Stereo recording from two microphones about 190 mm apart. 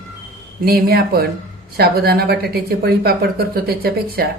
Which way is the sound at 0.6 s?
55° right (ahead or behind).